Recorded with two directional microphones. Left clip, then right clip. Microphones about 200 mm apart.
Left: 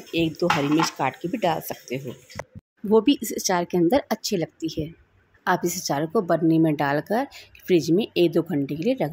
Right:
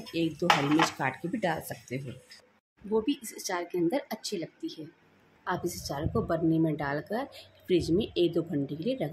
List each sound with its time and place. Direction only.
0.1 s a woman's voice: 30° left (ahead or behind)